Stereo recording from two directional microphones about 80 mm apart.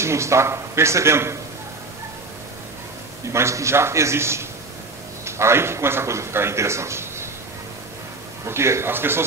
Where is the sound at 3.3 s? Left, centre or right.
Right.